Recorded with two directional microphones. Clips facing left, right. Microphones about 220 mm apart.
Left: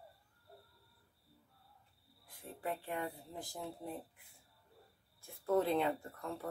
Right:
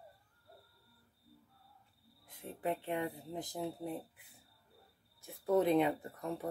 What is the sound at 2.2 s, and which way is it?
Speech, 20° right (ahead or behind).